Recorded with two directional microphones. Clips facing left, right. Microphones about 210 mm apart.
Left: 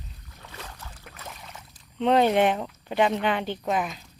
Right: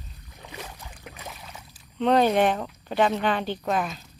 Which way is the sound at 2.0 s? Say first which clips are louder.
Even; 20° left (ahead or behind).